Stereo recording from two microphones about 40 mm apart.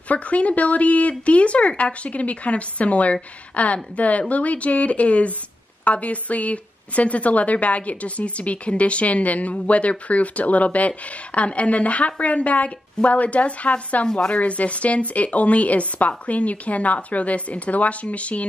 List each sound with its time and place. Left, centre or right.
0.1 s speech: left